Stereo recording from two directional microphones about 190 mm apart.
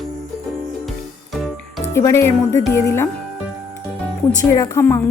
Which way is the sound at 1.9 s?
15° left (ahead or behind).